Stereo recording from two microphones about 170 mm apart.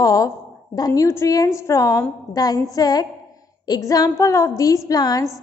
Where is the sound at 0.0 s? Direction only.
20° left (ahead or behind).